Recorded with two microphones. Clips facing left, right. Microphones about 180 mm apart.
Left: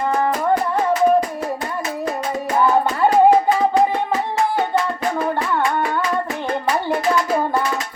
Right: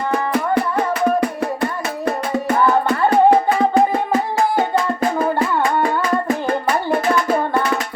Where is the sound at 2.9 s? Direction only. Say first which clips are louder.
Even; 55° right (ahead or behind).